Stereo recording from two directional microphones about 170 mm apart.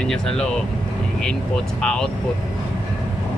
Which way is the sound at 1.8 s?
5° left (ahead or behind).